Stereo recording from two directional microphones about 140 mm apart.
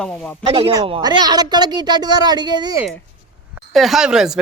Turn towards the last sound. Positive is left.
turn(degrees=-5)  # may be behind; listen again after turning